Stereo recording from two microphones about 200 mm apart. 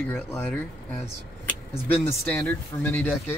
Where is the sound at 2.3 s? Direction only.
10° left (ahead or behind).